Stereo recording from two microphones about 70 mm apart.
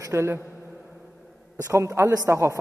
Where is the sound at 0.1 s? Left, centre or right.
Right.